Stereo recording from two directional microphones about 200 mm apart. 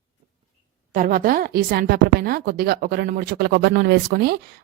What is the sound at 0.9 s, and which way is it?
A woman's voice, 45° right (ahead or behind).